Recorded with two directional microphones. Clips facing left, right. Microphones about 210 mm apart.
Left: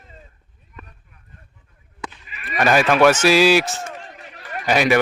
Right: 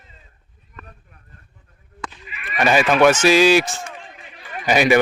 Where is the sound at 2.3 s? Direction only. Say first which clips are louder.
Left 1 dB; 40° left (ahead or behind).